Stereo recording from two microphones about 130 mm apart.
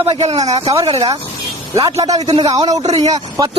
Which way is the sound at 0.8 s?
40° right (ahead or behind).